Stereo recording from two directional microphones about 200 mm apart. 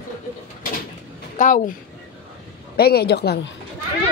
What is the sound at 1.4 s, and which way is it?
Speech, 40° left (ahead or behind).